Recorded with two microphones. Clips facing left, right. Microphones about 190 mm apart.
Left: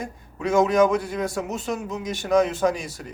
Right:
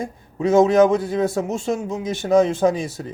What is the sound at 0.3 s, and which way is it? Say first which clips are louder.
Speech: right 5 dB; 30° right (ahead or behind).